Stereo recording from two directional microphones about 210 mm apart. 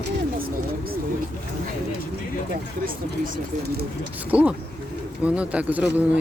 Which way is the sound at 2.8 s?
40° right (ahead or behind).